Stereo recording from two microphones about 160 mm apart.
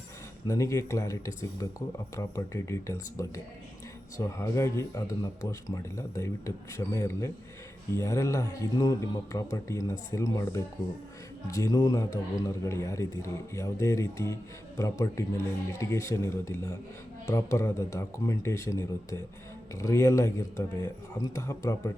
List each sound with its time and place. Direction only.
0.4 s a man's voice: 20° left (ahead or behind)